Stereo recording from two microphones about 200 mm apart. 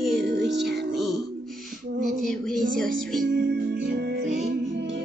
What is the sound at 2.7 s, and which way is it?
Music, centre (ahead or behind).